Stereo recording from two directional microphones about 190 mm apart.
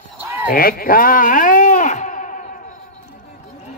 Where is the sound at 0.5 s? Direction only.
50° left (ahead or behind).